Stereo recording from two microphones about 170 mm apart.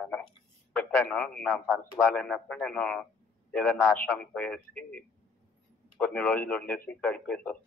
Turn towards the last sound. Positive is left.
turn(degrees=5)  # may be behind; listen again after turning